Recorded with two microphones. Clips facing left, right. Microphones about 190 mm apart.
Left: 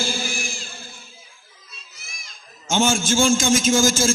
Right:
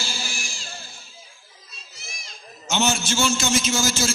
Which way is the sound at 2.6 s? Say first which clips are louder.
Left 4 dB; 45° left (ahead or behind).